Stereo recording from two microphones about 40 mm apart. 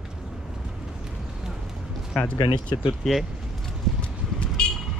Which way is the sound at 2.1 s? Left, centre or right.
Centre.